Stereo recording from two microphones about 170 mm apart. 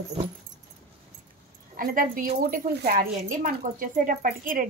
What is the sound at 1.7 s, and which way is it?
Speech, 55° right (ahead or behind).